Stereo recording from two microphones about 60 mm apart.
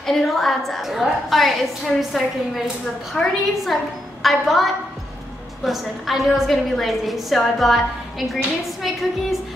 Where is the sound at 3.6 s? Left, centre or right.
Centre.